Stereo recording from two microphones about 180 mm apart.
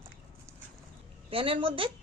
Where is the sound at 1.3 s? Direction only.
30° right (ahead or behind).